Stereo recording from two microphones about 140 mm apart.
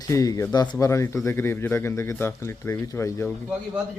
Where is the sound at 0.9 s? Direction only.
20° left (ahead or behind).